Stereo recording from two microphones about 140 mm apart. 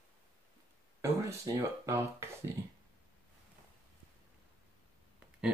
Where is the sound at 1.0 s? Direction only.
20° right (ahead or behind).